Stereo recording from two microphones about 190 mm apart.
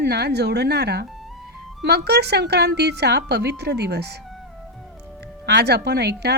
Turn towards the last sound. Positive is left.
turn(degrees=-60)  # may be behind; listen again after turning